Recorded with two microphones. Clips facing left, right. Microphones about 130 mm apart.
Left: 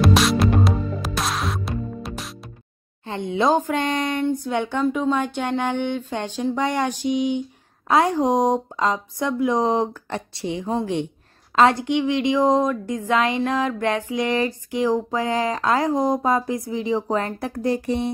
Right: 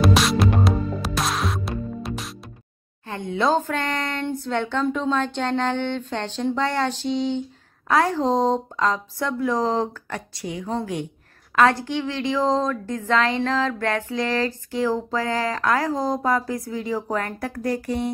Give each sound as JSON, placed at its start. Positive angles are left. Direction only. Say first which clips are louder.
{"t": 0.0, "sound": "music", "louder": "left 1 dB", "side_deg": 0}
{"t": 3.1, "sound": "a woman's voice", "louder": "left 2 dB", "side_deg": 20}